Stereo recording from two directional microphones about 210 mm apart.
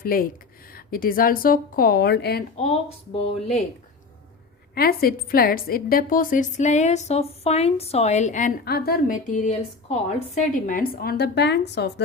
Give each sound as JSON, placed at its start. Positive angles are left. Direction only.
{"t": 0.0, "sound": "a woman's voice", "side_deg": 45}
{"t": 2.6, "sound": "speech", "side_deg": 30}
{"t": 4.7, "sound": "a woman's voice", "side_deg": 45}